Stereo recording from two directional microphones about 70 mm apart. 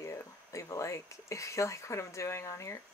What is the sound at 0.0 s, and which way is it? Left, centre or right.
Speech, left.